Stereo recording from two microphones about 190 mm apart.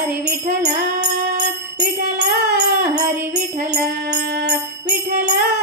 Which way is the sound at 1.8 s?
60° right (ahead or behind).